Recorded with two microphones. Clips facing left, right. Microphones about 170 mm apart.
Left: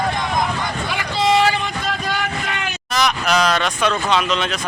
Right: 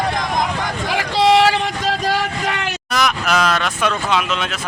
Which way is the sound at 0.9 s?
90° right.